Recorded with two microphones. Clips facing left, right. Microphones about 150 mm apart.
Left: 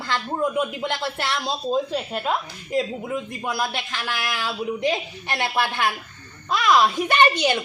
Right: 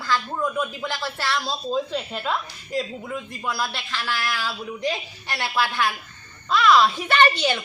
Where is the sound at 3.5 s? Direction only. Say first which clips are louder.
Left 1 dB; 15° left (ahead or behind).